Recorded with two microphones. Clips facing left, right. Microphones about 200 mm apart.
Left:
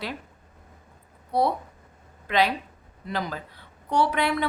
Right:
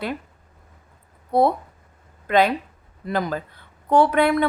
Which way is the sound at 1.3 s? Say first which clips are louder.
Right 5 dB; 50° right (ahead or behind).